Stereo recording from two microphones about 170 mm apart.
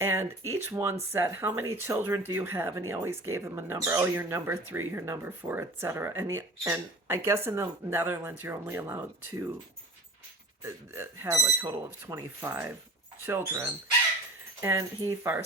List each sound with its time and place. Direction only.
0.0 s speech: 15° right (ahead or behind)
10.6 s speech: 15° right (ahead or behind)